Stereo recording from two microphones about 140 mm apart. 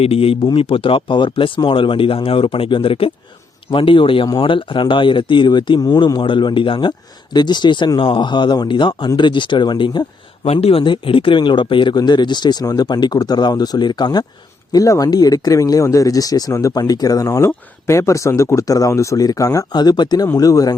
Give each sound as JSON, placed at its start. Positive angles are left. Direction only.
{"t": 0.0, "sound": "speech", "side_deg": 45}
{"t": 10.4, "sound": "speech", "side_deg": 45}